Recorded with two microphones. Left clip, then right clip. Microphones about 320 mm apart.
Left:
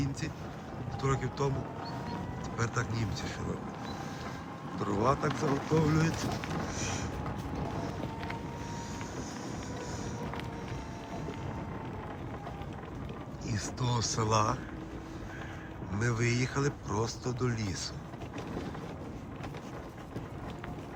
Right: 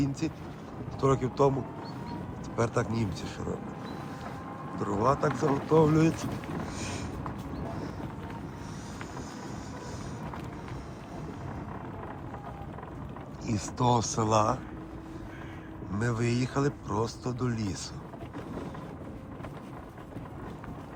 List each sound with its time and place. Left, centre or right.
0.0 s a man's voice: centre
2.6 s speech: centre
4.8 s a man's voice: centre
13.5 s speech: centre
15.9 s speech: centre